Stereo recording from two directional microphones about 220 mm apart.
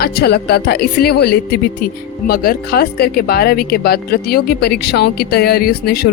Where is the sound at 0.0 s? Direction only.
45° left (ahead or behind).